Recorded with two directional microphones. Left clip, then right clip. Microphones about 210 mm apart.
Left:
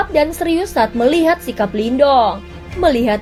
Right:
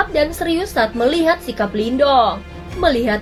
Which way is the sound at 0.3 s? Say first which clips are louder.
Left 2 dB; 30° left (ahead or behind).